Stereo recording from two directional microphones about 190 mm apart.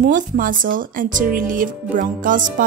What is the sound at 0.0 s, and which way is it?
Speech, 45° right (ahead or behind).